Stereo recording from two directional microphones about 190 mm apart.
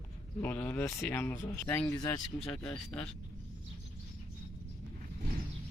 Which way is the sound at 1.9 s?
20° left (ahead or behind).